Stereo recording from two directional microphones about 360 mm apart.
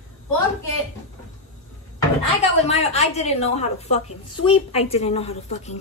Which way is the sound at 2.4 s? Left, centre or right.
Centre.